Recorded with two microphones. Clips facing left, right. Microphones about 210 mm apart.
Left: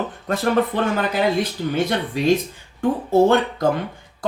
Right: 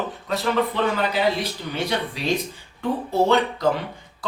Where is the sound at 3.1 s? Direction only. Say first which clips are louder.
Left 4 dB; 50° left (ahead or behind).